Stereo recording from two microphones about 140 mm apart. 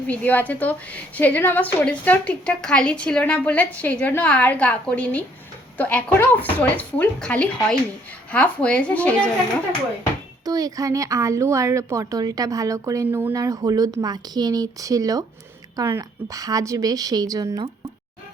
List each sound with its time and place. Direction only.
0.1 s a woman's voice: 10° left (ahead or behind)
10.4 s speech: 25° right (ahead or behind)